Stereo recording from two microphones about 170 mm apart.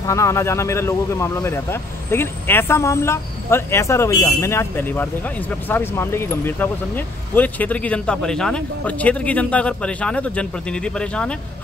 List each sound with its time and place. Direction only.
0.0 s speech: 20° left (ahead or behind)